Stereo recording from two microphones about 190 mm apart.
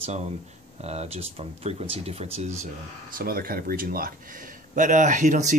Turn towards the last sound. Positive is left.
turn(degrees=-40)  # may be behind; listen again after turning